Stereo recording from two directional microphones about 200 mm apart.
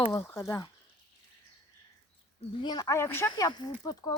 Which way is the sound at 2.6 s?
20° left (ahead or behind).